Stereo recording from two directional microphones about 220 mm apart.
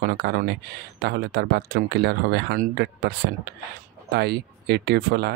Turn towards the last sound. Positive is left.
turn(degrees=-45)  # may be behind; listen again after turning